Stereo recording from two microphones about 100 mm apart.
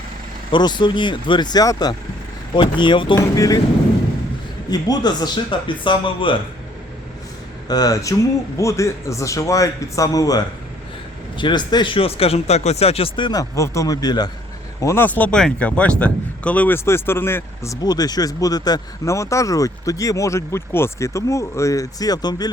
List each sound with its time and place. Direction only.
0.5 s speech: 50° left (ahead or behind)
2.6 s speech: 55° left (ahead or behind)
3.3 s speech: 35° left (ahead or behind)
4.7 s speech: 45° left (ahead or behind)
7.7 s speech: 40° left (ahead or behind)
11.3 s speech: 50° left (ahead or behind)
13.4 s speech: 35° left (ahead or behind)
14.8 s speech: 30° left (ahead or behind)
15.0 s speech: 15° left (ahead or behind)
17.8 s speech: 40° left (ahead or behind)